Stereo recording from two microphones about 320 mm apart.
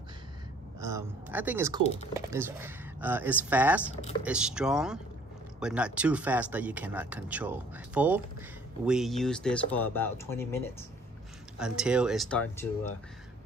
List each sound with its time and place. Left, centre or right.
0.7 s speech: centre
1.8 s speech: centre
2.3 s speech: centre